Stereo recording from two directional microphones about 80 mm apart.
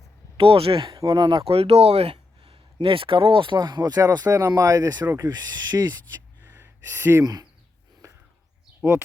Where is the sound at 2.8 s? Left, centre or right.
Right.